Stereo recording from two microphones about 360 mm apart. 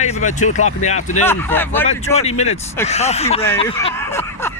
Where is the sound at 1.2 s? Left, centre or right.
Centre.